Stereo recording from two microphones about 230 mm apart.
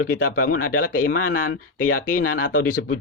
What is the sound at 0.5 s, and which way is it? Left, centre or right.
Speech, left.